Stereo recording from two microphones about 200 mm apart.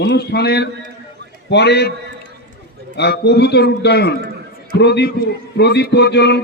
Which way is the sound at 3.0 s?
55° left (ahead or behind).